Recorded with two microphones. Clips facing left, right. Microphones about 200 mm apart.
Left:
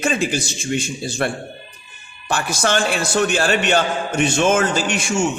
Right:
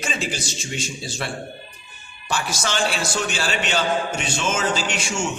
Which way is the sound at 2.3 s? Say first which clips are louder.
Left 6 dB; 55° left (ahead or behind).